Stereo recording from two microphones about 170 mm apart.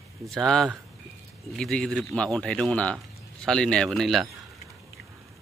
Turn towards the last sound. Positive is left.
turn(degrees=0)  # may be behind; listen again after turning